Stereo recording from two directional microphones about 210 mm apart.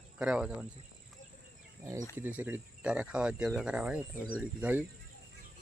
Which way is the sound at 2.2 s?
10° right (ahead or behind).